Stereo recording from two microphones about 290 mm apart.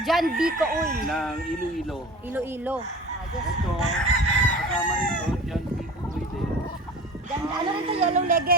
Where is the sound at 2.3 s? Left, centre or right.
Centre.